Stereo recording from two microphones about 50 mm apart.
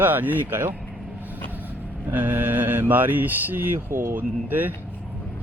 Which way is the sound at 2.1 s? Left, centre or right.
Right.